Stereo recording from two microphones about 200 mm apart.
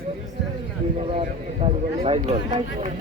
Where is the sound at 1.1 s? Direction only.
30° right (ahead or behind).